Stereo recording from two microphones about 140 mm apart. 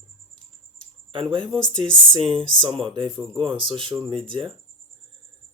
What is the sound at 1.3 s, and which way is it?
Speech, 40° right (ahead or behind).